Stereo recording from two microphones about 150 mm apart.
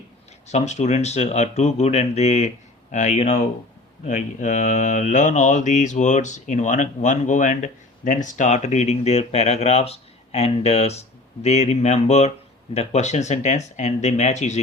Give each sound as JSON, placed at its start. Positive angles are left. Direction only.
{"t": 0.4, "sound": "mantra", "side_deg": 50}